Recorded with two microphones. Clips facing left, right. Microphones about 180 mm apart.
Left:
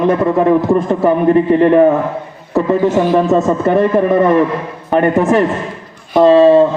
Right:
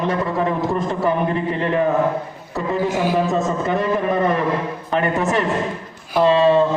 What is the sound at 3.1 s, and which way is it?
Speech, 55° left (ahead or behind).